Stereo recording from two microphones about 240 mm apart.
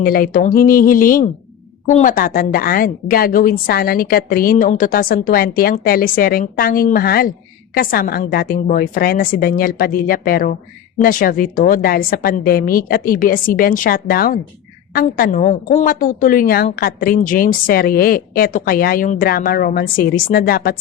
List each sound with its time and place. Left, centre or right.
0.0 s a woman's voice: left